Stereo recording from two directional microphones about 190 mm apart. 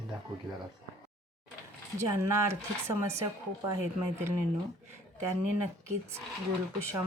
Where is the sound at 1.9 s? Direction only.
15° right (ahead or behind).